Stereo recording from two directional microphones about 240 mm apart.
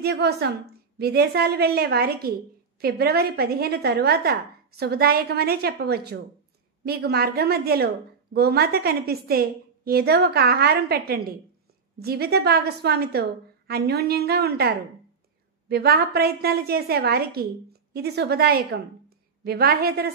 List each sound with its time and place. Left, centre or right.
0.0 s a woman's voice: right